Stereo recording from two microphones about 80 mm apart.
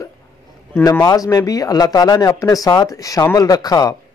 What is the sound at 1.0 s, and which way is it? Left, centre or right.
Speech, left.